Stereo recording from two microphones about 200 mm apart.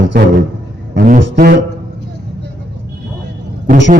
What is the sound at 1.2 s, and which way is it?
Speech, 60° right (ahead or behind).